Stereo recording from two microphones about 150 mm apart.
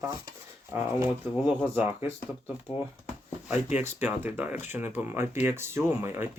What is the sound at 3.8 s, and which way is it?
Speech, 10° right (ahead or behind).